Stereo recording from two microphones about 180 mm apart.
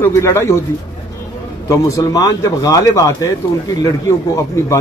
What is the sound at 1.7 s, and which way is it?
Speech, 15° left (ahead or behind).